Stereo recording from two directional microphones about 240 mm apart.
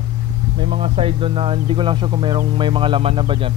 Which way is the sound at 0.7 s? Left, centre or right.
Right.